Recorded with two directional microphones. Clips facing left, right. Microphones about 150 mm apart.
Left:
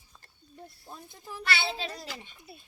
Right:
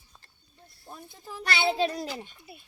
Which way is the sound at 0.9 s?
10° right (ahead or behind).